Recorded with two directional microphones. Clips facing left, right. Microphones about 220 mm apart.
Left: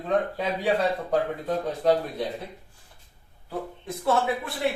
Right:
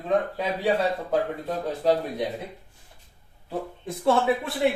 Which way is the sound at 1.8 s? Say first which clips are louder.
Right 1 dB; 10° right (ahead or behind).